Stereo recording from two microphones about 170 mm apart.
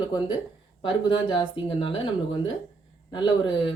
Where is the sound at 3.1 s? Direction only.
30° left (ahead or behind).